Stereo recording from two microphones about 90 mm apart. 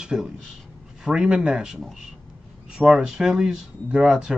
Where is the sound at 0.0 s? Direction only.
10° right (ahead or behind).